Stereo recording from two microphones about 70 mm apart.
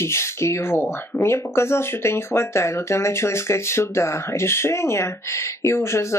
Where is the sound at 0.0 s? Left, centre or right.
Left.